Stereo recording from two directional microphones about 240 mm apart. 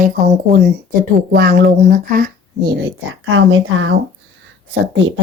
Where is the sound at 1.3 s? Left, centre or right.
Right.